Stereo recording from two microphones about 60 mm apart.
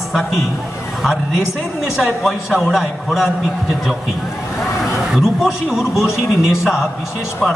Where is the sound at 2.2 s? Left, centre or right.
Centre.